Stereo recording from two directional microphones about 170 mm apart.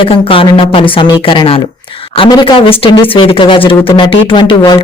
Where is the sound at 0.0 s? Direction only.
30° left (ahead or behind).